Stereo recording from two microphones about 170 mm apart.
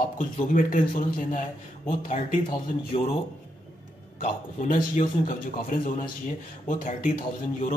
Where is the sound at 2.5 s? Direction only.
35° left (ahead or behind).